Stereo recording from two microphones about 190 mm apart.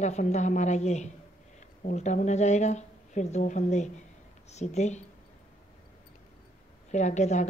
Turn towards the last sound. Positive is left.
turn(degrees=40)  # may be behind; listen again after turning